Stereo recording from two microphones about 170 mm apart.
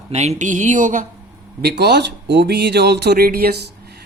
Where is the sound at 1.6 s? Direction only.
75° right (ahead or behind).